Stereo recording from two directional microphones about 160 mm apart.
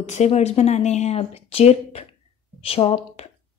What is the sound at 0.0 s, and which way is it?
A woman's voice, 45° left (ahead or behind).